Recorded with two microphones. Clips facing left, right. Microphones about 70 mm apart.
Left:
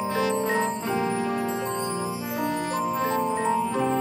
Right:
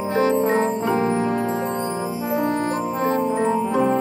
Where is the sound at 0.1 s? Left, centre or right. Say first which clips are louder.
Right 8 dB; right.